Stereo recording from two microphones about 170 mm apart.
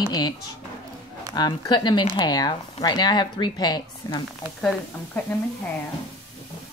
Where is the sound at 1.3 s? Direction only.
25° left (ahead or behind).